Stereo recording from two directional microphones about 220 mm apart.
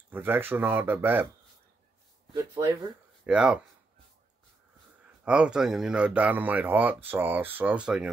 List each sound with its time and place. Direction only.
0.1 s speech: 10° right (ahead or behind)
2.3 s speech: 15° right (ahead or behind)
3.3 s speech: 5° right (ahead or behind)
5.2 s speech: 5° right (ahead or behind)